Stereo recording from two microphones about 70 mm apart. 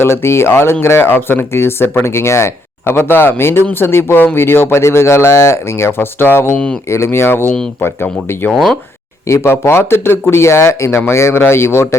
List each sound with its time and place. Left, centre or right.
0.0 s speech: left
8.5 s speech: centre
9.2 s speech: left